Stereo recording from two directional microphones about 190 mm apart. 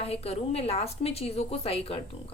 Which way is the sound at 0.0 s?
30° left (ahead or behind).